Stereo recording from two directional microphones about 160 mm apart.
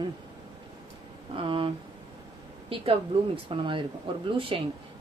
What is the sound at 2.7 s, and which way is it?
A woman's voice, 35° right (ahead or behind).